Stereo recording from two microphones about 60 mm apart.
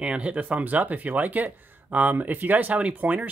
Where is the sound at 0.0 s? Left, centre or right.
Right.